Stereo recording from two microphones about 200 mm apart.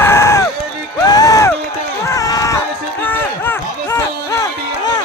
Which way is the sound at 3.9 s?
15° left (ahead or behind).